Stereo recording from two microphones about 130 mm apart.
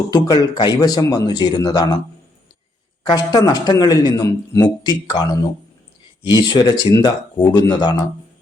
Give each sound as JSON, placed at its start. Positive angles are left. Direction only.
{"t": 0.1, "sound": "speech", "side_deg": 30}
{"t": 3.1, "sound": "speech", "side_deg": 30}